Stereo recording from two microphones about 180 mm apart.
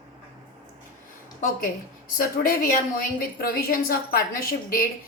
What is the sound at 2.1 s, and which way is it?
A woman's voice, 55° left (ahead or behind).